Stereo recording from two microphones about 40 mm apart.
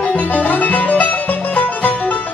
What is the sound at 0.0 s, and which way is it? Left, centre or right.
Music, left.